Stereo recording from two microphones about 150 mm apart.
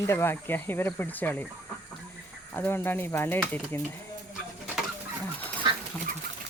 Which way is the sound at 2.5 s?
15° left (ahead or behind).